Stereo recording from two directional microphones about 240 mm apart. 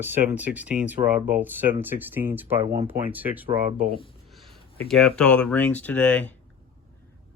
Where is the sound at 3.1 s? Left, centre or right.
Centre.